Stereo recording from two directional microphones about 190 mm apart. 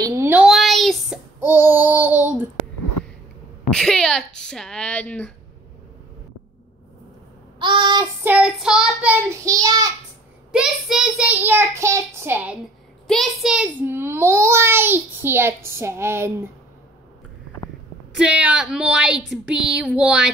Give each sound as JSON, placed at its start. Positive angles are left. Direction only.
{"t": 0.0, "sound": "a sound", "side_deg": -15}
{"t": 1.4, "sound": "child singing", "side_deg": -10}
{"t": 3.7, "sound": "speech", "side_deg": 5}
{"t": 7.5, "sound": "child singing", "side_deg": -25}
{"t": 8.3, "sound": "a child's voice", "side_deg": -5}
{"t": 10.5, "sound": "a child's voice", "side_deg": -5}
{"t": 13.0, "sound": "a child's voice", "side_deg": 0}
{"t": 18.1, "sound": "speech", "side_deg": -5}